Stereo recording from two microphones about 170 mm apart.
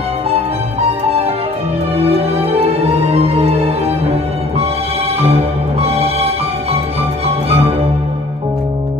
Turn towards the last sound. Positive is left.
turn(degrees=-35)  # may be behind; listen again after turning